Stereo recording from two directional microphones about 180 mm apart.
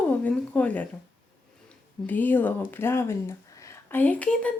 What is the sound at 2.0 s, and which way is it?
Speech, 10° left (ahead or behind).